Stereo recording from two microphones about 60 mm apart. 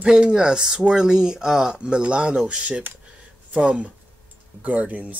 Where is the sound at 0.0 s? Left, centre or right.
Centre.